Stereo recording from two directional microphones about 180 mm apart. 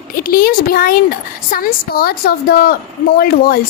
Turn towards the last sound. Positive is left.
turn(degrees=55)  # may be behind; listen again after turning